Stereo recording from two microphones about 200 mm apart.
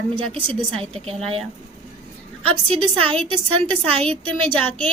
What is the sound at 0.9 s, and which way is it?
Speech, 30° right (ahead or behind).